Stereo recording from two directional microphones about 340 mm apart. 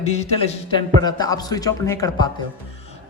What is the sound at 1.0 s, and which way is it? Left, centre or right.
A man's voice, centre.